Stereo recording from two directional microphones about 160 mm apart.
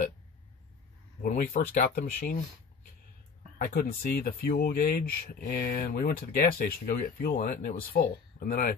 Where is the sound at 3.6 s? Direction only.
60° left (ahead or behind).